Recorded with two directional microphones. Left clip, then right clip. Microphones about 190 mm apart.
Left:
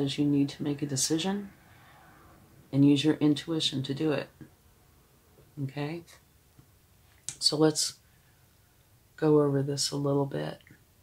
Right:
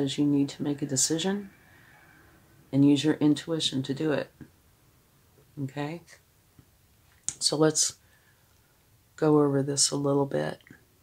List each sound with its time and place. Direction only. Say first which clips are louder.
0.0 s speech: right 2 dB; 35° right (ahead or behind)
2.7 s speech: right 1 dB; 35° right (ahead or behind)
5.7 s speech: right 1 dB; 40° right (ahead or behind)
7.2 s speech: right 1 dB; 45° right (ahead or behind)
9.1 s speech: right 1 dB; 45° right (ahead or behind)